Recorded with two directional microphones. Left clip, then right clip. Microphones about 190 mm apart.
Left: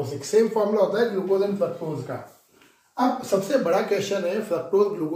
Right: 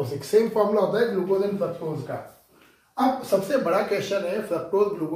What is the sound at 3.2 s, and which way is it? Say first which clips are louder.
Speech: even; 25° left (ahead or behind).